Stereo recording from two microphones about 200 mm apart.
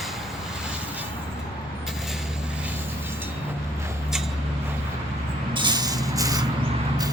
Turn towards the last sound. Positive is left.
turn(degrees=-20)  # may be behind; listen again after turning